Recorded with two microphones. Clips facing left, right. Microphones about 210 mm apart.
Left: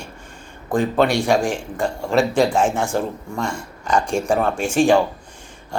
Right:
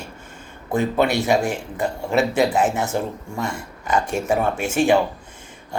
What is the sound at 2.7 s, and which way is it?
Speech, 20° right (ahead or behind).